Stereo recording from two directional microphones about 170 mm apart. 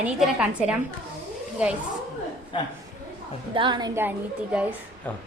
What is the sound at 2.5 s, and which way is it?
Speech, 30° left (ahead or behind).